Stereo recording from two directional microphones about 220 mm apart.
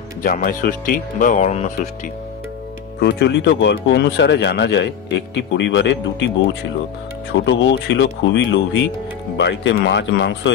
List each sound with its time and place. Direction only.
0.2 s speech: 40° left (ahead or behind)
3.0 s speech: 50° left (ahead or behind)